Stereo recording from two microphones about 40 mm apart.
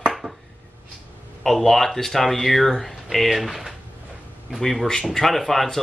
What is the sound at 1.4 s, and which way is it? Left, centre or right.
Speech, centre.